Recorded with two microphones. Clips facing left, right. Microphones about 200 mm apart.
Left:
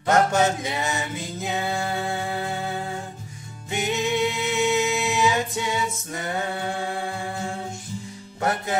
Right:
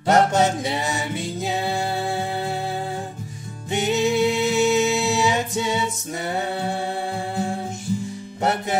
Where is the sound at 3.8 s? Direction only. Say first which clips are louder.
Right 4 dB; 35° right (ahead or behind).